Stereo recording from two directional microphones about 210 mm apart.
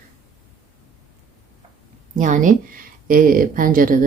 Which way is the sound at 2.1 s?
35° right (ahead or behind).